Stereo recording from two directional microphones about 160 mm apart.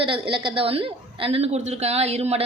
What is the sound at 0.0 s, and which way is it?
Speech, 30° right (ahead or behind).